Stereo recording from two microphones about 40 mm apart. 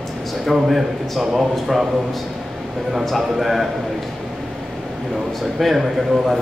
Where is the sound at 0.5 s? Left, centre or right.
Centre.